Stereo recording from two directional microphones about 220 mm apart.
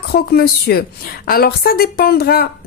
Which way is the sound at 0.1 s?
45° left (ahead or behind).